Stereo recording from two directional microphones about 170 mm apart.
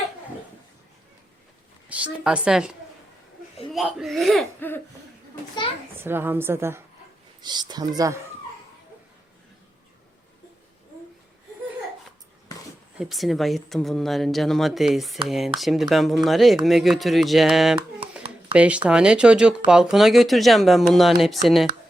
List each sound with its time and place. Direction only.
1.9 s speech: 5° right (ahead or behind)
6.0 s a woman's voice: 15° right (ahead or behind)
7.4 s speech: 25° right (ahead or behind)
13.0 s a woman's voice: centre (ahead or behind)